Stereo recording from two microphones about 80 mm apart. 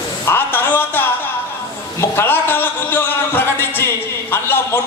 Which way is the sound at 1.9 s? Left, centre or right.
Left.